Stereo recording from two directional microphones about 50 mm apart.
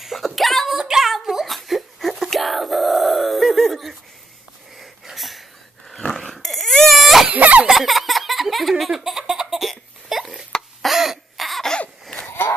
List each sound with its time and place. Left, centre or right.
0.0 s a sound: centre
4.7 s wheeze: centre
5.9 s dog: centre
7.2 s a sound: right
7.7 s laughter: centre
10.9 s cough: centre